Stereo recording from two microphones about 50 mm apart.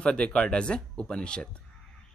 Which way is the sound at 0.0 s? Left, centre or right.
Centre.